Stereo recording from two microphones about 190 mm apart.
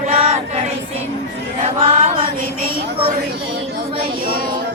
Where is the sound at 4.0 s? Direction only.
50° right (ahead or behind).